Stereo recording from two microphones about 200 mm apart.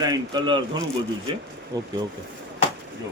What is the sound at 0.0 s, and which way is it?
Speech, 20° right (ahead or behind).